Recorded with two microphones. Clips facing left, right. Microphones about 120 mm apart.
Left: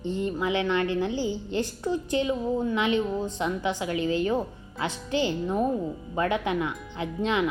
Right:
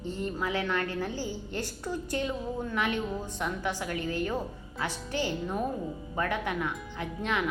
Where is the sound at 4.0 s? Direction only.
90° left.